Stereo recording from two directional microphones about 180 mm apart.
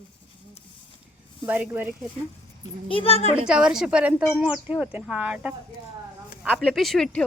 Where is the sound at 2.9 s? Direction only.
30° left (ahead or behind).